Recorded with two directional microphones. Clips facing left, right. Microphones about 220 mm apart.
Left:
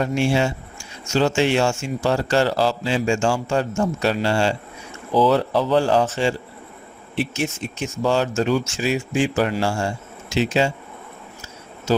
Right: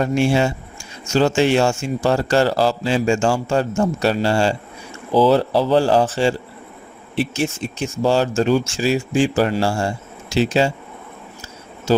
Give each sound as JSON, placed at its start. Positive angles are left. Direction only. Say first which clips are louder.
{"t": 0.0, "sound": "a man's voice", "louder": "right 3 dB", "side_deg": -40}
{"t": 11.9, "sound": "a man's voice", "louder": "right 3 dB", "side_deg": -30}